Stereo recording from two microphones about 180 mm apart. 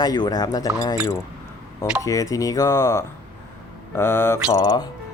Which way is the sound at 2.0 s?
20° left (ahead or behind).